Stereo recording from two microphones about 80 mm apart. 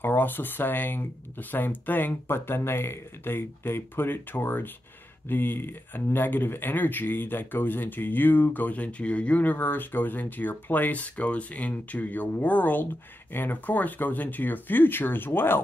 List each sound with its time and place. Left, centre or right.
0.0 s speech: left